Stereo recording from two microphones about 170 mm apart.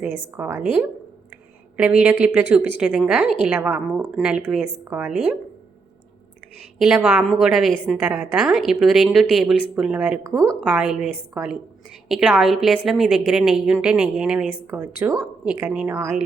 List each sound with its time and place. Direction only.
0.0 s a woman's voice: 15° right (ahead or behind)
6.7 s a woman's voice: 5° right (ahead or behind)
7.9 s a woman's voice: 10° right (ahead or behind)